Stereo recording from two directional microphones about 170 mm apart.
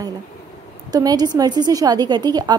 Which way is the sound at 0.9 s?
25° right (ahead or behind).